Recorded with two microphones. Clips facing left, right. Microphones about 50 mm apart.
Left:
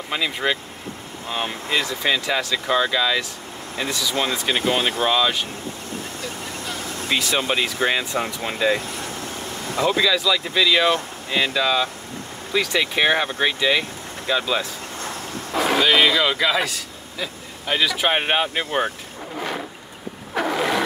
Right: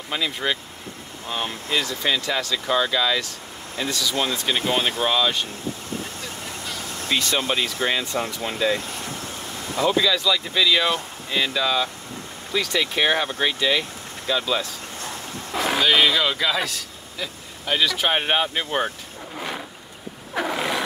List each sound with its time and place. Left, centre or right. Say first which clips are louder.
0.1 s speech: left 2 dB; centre
1.7 s speech: left 2 dB; centre
7.1 s speech: left 1 dB; centre; by 8.8 s left
9.8 s speech: left 1 dB; centre
15.5 s speech: left 2 dB; centre
20.3 s roaring cats: left 3 dB; centre